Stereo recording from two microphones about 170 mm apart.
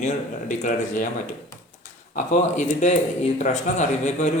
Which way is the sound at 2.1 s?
45° left (ahead or behind).